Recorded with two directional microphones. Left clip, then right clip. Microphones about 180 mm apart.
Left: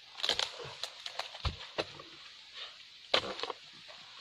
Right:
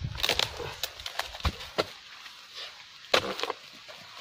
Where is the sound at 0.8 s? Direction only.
Centre (ahead or behind).